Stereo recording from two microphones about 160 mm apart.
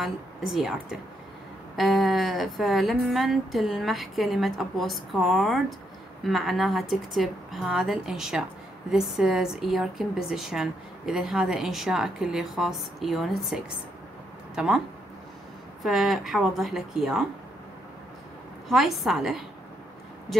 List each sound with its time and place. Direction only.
0.0 s a woman's voice: centre (ahead or behind)
15.8 s a woman's voice: centre (ahead or behind)
18.7 s a woman's voice: centre (ahead or behind)